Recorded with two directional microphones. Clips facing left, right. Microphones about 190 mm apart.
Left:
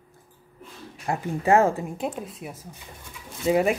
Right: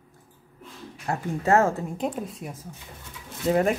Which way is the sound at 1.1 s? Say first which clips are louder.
Left 1 dB; 15° left (ahead or behind).